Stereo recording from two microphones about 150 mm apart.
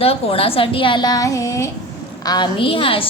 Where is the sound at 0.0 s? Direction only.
40° left (ahead or behind).